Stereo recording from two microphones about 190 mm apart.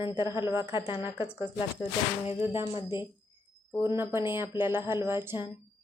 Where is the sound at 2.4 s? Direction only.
15° right (ahead or behind).